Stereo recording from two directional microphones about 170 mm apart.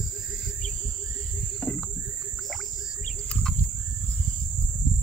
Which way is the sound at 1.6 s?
5° left (ahead or behind).